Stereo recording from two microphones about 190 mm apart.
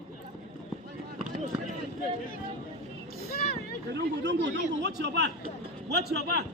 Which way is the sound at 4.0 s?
60° right (ahead or behind).